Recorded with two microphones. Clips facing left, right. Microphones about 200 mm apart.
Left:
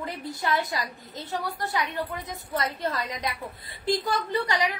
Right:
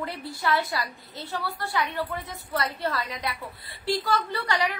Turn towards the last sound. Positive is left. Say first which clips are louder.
# left 1 dB
turn(degrees=15)  # may be behind; listen again after turning